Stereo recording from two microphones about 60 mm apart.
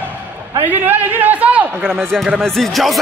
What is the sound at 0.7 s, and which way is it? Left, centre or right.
A man's voice, right.